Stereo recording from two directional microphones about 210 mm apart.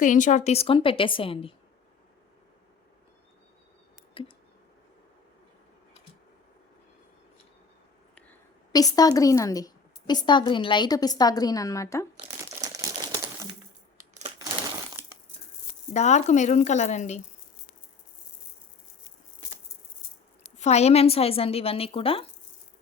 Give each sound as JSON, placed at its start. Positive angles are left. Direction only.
{"t": 0.0, "sound": "a woman's voice", "side_deg": 35}
{"t": 4.2, "sound": "a sound", "side_deg": 25}
{"t": 8.7, "sound": "a woman's voice", "side_deg": 15}
{"t": 12.6, "sound": "typewriter", "side_deg": -15}
{"t": 14.1, "sound": "a sound", "side_deg": -30}
{"t": 15.9, "sound": "speech", "side_deg": 35}
{"t": 20.4, "sound": "a woman's voice", "side_deg": 30}